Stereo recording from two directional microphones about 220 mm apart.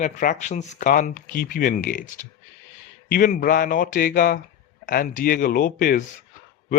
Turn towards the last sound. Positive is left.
turn(degrees=40)  # may be behind; listen again after turning